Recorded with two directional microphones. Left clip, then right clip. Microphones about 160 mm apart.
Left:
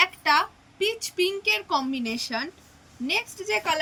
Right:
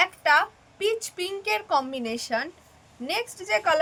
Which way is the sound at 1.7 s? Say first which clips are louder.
Right 1 dB; 75° right (ahead or behind).